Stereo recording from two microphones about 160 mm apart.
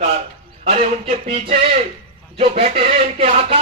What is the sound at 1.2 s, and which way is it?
Speech, 35° right (ahead or behind).